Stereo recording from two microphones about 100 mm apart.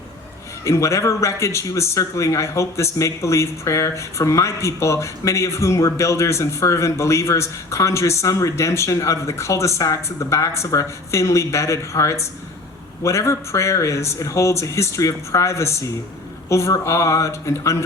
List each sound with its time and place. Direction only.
0.6 s speech: 30° left (ahead or behind)